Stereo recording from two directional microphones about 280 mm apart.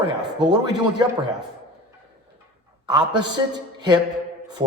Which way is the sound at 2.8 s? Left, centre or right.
Centre.